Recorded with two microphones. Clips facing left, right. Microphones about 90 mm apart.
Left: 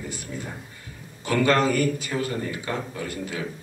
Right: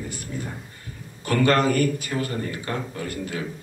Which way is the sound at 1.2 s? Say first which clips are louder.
Right 1 dB; 45° right (ahead or behind).